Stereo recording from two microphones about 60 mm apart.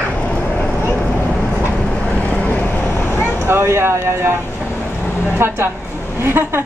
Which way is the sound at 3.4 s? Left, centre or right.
Right.